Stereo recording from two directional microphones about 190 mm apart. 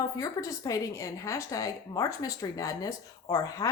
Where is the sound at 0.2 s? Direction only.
20° left (ahead or behind).